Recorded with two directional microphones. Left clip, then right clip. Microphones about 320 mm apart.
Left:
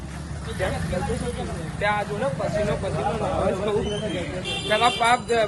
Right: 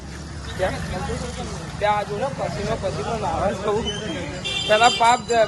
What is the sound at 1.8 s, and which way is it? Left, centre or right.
Speech, centre.